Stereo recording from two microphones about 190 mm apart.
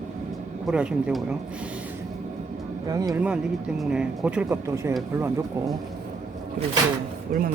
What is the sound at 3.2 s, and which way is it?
Speech, 5° right (ahead or behind).